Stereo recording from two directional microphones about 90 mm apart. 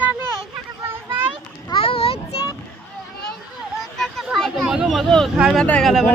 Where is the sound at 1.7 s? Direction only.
90° left.